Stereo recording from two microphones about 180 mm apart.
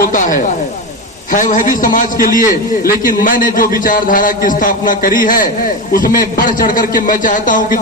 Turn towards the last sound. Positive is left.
turn(degrees=45)  # may be behind; listen again after turning